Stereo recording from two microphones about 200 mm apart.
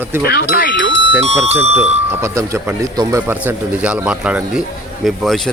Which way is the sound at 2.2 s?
15° right (ahead or behind).